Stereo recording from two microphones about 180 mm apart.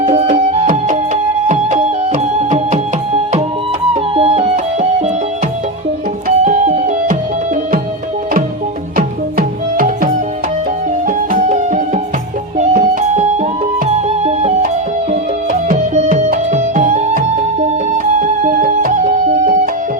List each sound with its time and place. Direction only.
0.0 s music: 35° right (ahead or behind)
3.9 s music: 35° right (ahead or behind)
6.2 s music: 45° right (ahead or behind)
9.0 s music: 50° right (ahead or behind)
15.7 s music: 50° right (ahead or behind)